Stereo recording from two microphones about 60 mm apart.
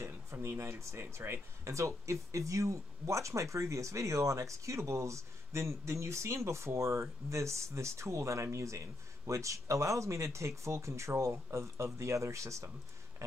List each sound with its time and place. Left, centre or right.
0.0 s speech: right
1.6 s speech: right